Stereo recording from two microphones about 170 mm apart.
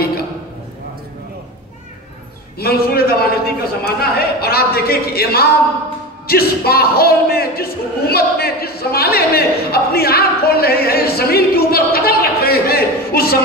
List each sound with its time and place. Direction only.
2.6 s a man's voice: 65° left (ahead or behind)